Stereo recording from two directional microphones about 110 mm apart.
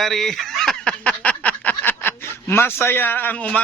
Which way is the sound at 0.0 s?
Centre (ahead or behind).